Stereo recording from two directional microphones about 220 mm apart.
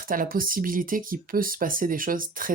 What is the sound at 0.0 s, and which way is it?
Speech, 40° right (ahead or behind).